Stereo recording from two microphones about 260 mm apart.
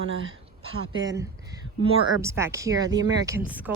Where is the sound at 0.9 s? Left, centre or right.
Centre.